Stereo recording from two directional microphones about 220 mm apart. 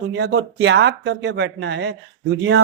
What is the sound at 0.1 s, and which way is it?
A man's voice, 50° right (ahead or behind).